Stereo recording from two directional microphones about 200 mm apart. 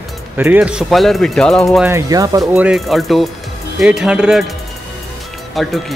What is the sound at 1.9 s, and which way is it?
Speech, 15° right (ahead or behind).